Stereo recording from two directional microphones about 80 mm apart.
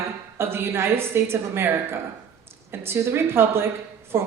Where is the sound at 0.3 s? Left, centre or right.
Right.